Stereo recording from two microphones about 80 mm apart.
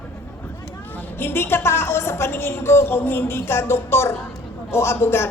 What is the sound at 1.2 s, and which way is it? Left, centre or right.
A woman's voice, left.